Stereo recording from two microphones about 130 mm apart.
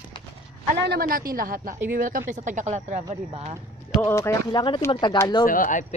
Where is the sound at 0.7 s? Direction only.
90° right; by 3.6 s 60° right (ahead or behind).